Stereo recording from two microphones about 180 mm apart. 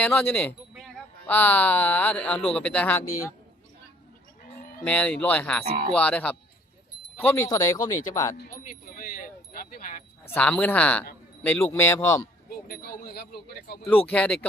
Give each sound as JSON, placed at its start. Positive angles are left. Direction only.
{"t": 0.0, "sound": "speech", "side_deg": 10}
{"t": 4.9, "sound": "speech", "side_deg": 5}
{"t": 8.4, "sound": "speech", "side_deg": 50}
{"t": 10.2, "sound": "speech", "side_deg": 10}
{"t": 12.6, "sound": "speech", "side_deg": 55}
{"t": 14.1, "sound": "speech", "side_deg": 5}